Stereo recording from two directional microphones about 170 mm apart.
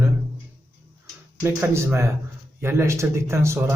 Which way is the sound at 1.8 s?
15° right (ahead or behind).